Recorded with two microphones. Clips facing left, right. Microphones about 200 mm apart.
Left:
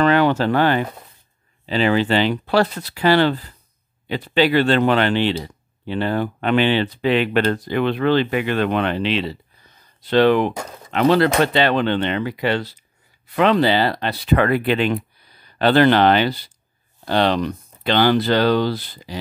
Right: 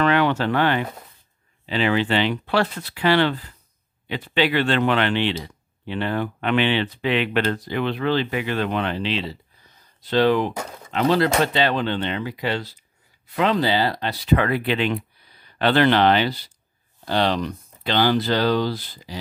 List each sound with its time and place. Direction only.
0.0 s speech: 40° left (ahead or behind); by 19.1 s 65° left (ahead or behind)